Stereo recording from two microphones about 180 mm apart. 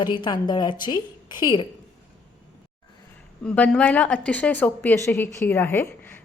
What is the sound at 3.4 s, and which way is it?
A woman's voice, 5° left (ahead or behind).